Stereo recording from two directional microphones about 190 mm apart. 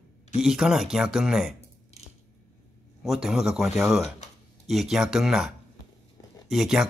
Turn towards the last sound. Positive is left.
turn(degrees=0)  # may be behind; listen again after turning